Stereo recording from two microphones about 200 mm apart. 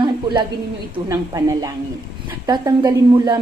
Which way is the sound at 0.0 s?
20° right (ahead or behind).